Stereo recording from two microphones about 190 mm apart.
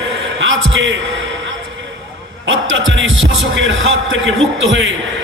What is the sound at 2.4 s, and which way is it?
Speech, 85° right.